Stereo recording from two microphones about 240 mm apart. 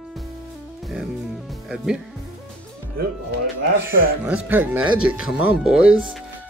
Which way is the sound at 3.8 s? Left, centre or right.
Centre.